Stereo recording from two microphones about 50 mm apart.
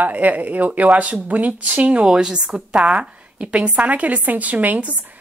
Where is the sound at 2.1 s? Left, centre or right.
Centre.